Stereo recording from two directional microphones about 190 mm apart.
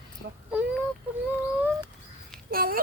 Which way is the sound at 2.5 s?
50° right (ahead or behind).